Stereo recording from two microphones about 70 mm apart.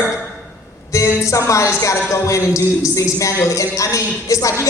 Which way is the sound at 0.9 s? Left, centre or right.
Left.